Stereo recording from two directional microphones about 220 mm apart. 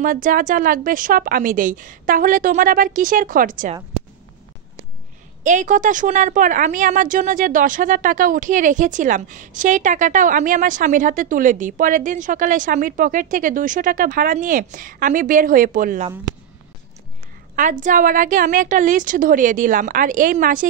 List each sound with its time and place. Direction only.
0.0 s a woman's voice: 40° right (ahead or behind)
5.4 s a woman's voice: 35° right (ahead or behind)
17.6 s a woman's voice: 35° right (ahead or behind)